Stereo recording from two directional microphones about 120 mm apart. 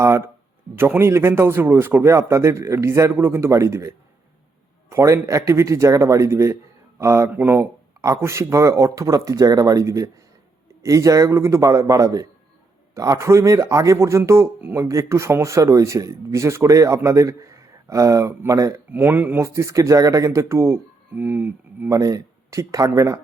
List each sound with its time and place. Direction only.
0.8 s speech: 20° right (ahead or behind)
21.9 s speech: 30° right (ahead or behind)